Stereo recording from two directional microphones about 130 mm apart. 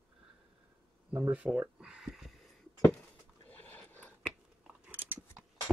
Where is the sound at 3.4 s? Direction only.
15° left (ahead or behind).